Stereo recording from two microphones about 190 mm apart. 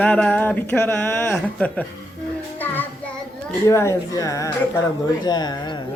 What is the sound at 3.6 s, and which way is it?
Speech, 15° left (ahead or behind).